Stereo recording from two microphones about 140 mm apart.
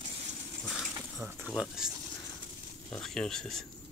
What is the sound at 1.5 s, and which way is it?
Speech, 5° right (ahead or behind).